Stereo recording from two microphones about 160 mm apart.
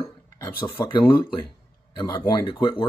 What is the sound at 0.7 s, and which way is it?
Speech, 30° left (ahead or behind).